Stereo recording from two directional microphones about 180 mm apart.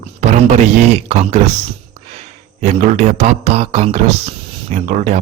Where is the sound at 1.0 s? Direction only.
35° right (ahead or behind).